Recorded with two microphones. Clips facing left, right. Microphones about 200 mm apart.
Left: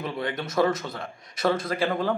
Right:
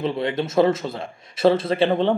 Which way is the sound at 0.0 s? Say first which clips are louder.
Right 7 dB; 25° right (ahead or behind).